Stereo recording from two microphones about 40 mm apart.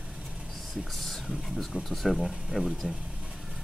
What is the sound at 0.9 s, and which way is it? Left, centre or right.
Speech, centre.